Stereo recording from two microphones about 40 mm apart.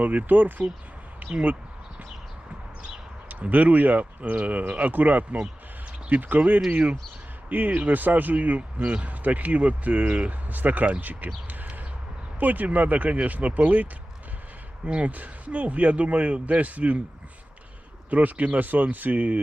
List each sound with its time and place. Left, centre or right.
0.0 s speech: right
3.2 s speech: right
12.4 s speech: right
14.8 s speech: right
18.1 s speech: right